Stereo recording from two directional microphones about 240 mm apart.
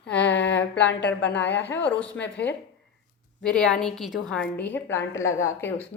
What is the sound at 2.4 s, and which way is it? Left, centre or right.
Speech, left.